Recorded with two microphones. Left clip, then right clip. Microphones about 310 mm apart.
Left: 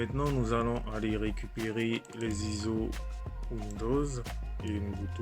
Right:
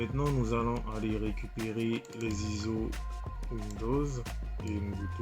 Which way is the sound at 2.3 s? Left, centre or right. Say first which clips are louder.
Left 1 dB; left.